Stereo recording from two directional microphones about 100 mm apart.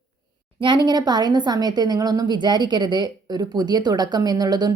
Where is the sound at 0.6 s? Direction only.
50° right (ahead or behind).